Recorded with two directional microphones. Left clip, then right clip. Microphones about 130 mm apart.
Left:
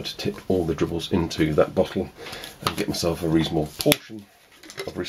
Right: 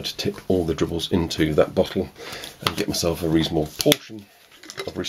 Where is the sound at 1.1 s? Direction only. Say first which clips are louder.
Right 1 dB; 30° right (ahead or behind); by 4.0 s 10° right (ahead or behind).